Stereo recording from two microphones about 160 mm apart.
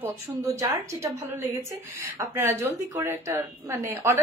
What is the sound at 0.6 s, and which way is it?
A woman's voice, 20° right (ahead or behind).